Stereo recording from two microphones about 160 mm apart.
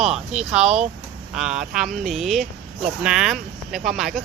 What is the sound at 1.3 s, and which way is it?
Speech, 5° right (ahead or behind).